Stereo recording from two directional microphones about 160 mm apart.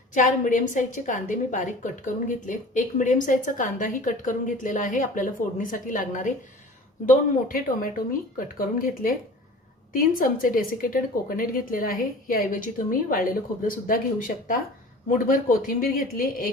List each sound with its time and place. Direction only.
0.1 s a woman's voice: 50° left (ahead or behind)